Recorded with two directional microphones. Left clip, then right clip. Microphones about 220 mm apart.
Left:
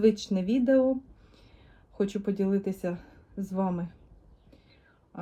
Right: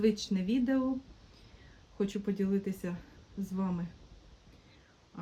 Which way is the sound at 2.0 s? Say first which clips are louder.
Left 5 dB; 10° right (ahead or behind).